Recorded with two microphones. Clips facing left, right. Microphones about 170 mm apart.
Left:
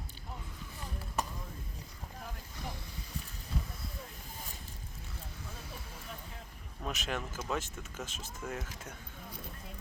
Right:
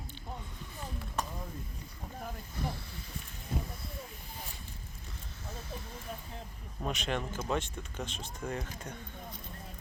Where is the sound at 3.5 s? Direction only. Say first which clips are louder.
Right 3 dB; 50° right (ahead or behind).